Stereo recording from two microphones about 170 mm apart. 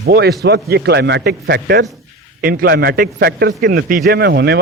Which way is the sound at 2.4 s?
60° right (ahead or behind).